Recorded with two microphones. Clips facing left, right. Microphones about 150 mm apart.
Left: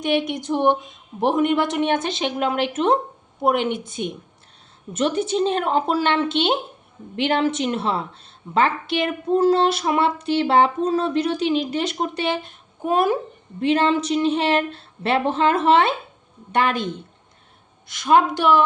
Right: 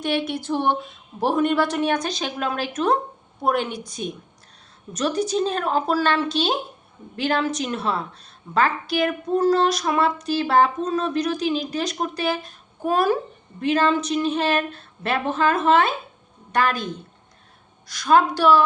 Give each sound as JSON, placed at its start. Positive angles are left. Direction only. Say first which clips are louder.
{"t": 0.0, "sound": "a woman's voice", "louder": "left 2 dB", "side_deg": 20}